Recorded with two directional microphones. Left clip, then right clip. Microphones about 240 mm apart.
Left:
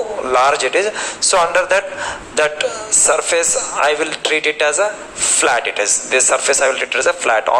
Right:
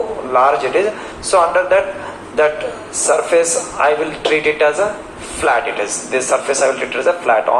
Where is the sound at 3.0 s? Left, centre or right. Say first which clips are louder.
Right 3 dB; left.